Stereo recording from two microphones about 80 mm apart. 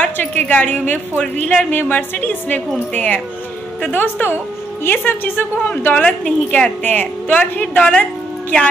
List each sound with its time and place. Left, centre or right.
0.0 s a woman's voice: centre